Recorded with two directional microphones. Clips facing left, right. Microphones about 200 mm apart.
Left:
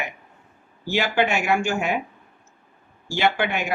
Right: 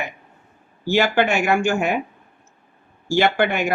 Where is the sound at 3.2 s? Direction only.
50° right (ahead or behind).